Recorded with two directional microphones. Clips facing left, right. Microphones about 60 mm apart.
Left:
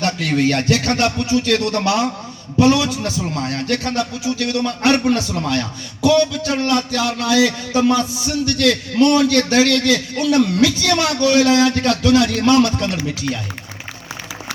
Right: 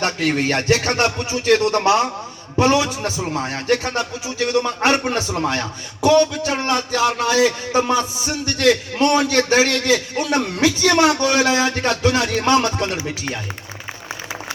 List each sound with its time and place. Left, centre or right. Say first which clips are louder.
0.0 s a man's voice: left 2 dB; right